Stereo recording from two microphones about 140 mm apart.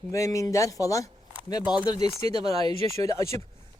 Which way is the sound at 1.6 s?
5° right (ahead or behind).